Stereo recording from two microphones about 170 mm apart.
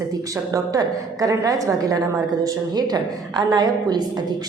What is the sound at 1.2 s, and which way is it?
A woman's voice, 20° right (ahead or behind).